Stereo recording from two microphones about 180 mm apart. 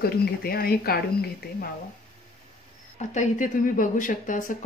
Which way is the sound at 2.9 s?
40° left (ahead or behind).